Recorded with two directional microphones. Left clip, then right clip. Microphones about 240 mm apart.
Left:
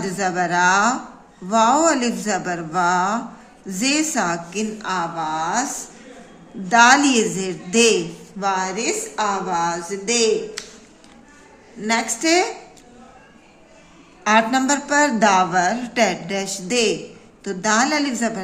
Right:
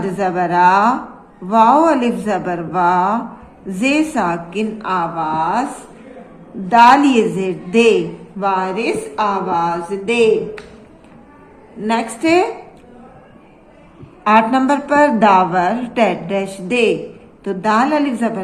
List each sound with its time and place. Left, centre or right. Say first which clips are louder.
0.0 s a woman's voice: right 4 dB; left
6.7 s a woman's voice: right 4 dB; left
11.8 s a woman's voice: right 3 dB; left
14.3 s a woman's voice: right 4 dB; left